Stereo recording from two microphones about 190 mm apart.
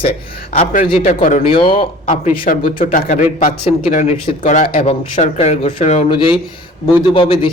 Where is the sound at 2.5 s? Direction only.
40° left (ahead or behind).